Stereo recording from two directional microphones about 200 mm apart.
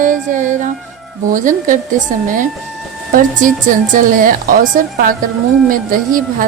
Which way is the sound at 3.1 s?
45° right (ahead or behind).